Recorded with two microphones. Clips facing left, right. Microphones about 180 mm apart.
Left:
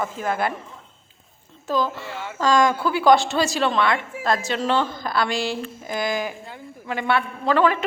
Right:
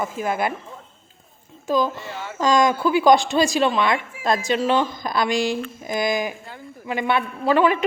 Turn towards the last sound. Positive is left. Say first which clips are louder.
# right 1 dB
turn(degrees=-15)  # may be behind; listen again after turning